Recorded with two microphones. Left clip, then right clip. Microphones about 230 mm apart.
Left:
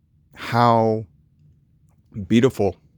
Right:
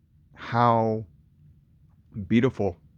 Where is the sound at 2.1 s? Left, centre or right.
Left.